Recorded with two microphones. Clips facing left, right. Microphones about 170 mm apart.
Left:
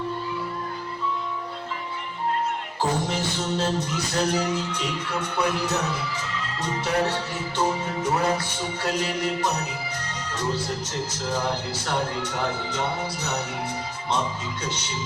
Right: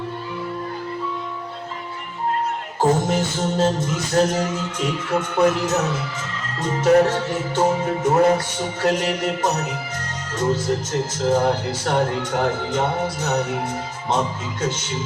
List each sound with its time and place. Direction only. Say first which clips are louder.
2.8 s music: right 7 dB; 45° right (ahead or behind)